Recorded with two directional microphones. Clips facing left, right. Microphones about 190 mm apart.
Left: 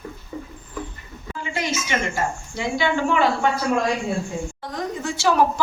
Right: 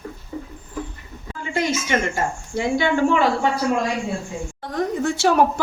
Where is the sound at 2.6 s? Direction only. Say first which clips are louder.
Right 4 dB; 50° right (ahead or behind).